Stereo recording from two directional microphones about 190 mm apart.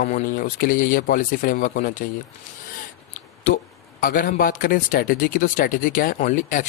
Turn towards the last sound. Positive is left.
turn(degrees=45)  # may be behind; listen again after turning